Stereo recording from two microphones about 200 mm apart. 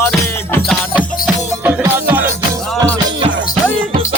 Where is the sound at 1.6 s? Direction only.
10° right (ahead or behind).